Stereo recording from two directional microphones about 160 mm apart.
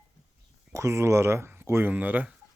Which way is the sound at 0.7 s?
15° right (ahead or behind).